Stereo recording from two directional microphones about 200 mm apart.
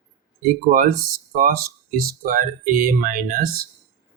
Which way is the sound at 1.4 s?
45° right (ahead or behind).